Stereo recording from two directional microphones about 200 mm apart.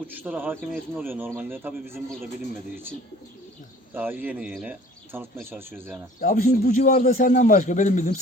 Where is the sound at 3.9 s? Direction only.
10° right (ahead or behind).